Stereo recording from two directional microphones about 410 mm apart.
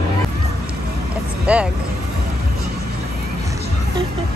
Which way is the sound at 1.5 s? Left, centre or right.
Centre.